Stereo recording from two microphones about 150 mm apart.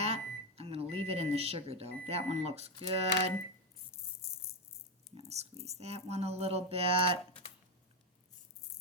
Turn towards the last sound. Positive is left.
turn(degrees=-40)  # may be behind; listen again after turning